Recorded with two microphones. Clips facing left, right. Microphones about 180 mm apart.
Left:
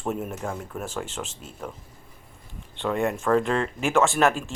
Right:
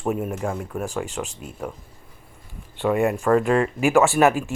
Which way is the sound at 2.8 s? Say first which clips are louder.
Right 4 dB; 5° right (ahead or behind).